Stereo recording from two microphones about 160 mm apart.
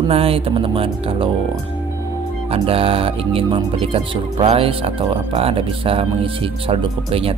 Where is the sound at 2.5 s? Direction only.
35° right (ahead or behind).